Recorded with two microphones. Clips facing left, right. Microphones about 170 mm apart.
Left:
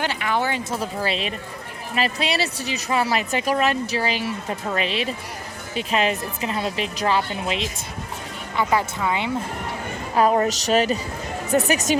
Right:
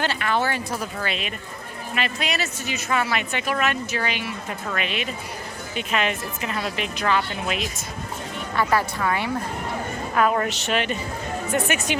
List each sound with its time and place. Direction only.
0.0 s a woman's voice: 15° left (ahead or behind)
8.5 s a woman's voice: 15° left (ahead or behind)
10.2 s speech: 30° left (ahead or behind)